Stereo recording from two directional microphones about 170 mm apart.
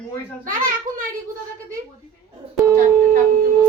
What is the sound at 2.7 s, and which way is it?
Shofar, 55° right (ahead or behind).